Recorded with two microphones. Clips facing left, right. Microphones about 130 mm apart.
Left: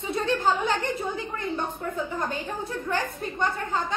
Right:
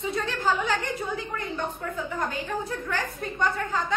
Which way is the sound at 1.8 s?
25° left (ahead or behind).